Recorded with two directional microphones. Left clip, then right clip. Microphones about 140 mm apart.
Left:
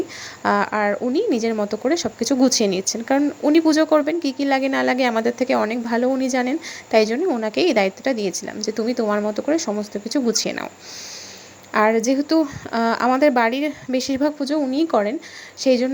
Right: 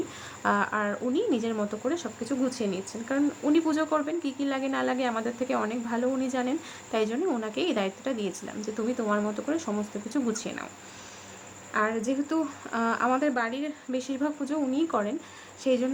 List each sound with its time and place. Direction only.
0.4 s a woman's voice: 25° left (ahead or behind)
10.4 s a woman's voice: 40° left (ahead or behind)
11.7 s a woman's voice: 40° left (ahead or behind)
11.9 s speech: 25° left (ahead or behind)
13.1 s a woman's voice: 40° left (ahead or behind); by 15.9 s 25° left (ahead or behind)